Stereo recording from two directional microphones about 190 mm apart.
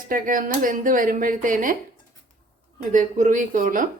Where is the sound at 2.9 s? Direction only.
40° right (ahead or behind).